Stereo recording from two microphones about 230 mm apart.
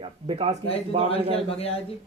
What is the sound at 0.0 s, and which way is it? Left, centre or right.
Speech, right.